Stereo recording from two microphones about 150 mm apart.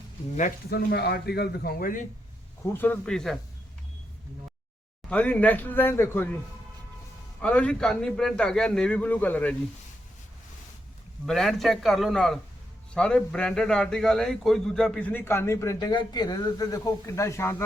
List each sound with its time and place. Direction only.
0.3 s speech: 75° left (ahead or behind)
2.6 s a man's voice: 15° left (ahead or behind)
5.0 s a man's voice: 10° left (ahead or behind)
7.4 s a man's voice: 10° left (ahead or behind)
11.3 s a man's voice: centre (ahead or behind); by 17.6 s 20° left (ahead or behind)